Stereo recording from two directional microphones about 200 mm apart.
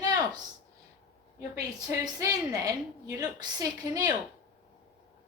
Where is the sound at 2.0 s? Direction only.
20° right (ahead or behind).